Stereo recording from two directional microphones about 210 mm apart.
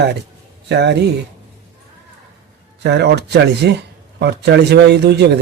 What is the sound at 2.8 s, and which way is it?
Speech, 55° right (ahead or behind).